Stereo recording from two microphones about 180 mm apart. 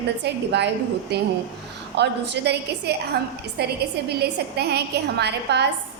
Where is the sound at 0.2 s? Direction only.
70° right (ahead or behind).